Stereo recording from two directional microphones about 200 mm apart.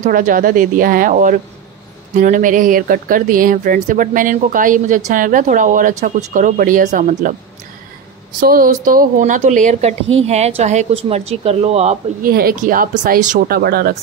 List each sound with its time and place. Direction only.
0.0 s speech: 40° right (ahead or behind)
8.4 s speech: 45° right (ahead or behind)
12.3 s speech: 50° right (ahead or behind)